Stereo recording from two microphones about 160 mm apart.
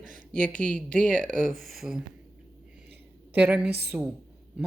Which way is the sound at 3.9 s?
5° right (ahead or behind).